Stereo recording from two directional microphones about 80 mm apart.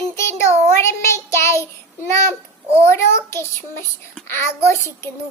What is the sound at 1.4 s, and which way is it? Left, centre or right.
Child singing, left.